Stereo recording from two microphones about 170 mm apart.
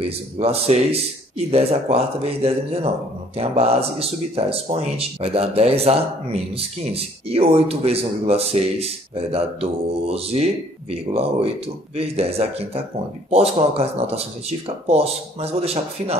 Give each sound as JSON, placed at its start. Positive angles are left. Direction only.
{"t": 0.4, "sound": "speech", "side_deg": -35}